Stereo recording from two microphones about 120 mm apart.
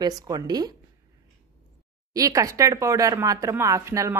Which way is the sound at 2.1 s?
30° right (ahead or behind).